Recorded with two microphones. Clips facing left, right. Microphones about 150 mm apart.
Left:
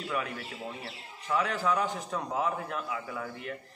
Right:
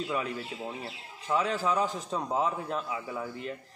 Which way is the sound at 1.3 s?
30° right (ahead or behind).